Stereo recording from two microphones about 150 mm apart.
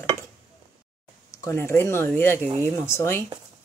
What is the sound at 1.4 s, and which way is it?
Speech, 15° left (ahead or behind).